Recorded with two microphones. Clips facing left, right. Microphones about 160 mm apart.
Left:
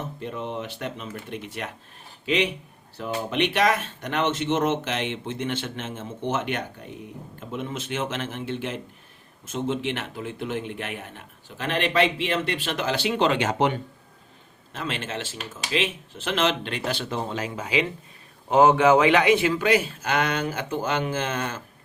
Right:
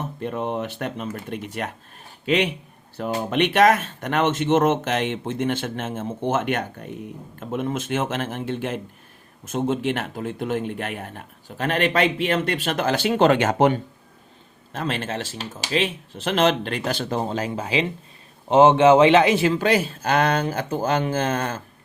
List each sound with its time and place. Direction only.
0.2 s a man's voice: 55° right (ahead or behind); by 21.6 s 35° right (ahead or behind)